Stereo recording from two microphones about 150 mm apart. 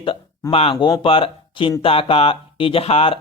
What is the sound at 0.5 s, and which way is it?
Speech, 35° left (ahead or behind).